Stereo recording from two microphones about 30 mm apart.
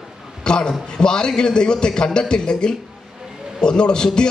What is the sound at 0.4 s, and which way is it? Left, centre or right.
A man's voice, left.